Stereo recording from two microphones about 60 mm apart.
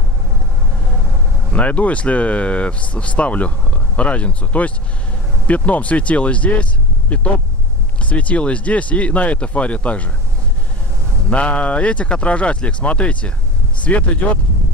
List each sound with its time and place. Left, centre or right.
1.5 s speech: left
11.2 s speech: left